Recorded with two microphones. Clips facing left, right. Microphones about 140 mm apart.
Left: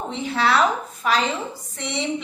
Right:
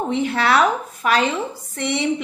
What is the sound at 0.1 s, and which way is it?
A woman's voice, 60° right (ahead or behind).